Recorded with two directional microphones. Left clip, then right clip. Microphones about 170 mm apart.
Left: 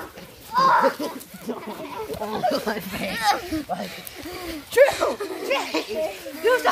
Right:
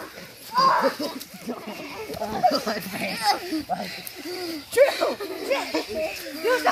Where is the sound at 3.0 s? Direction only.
10° left (ahead or behind).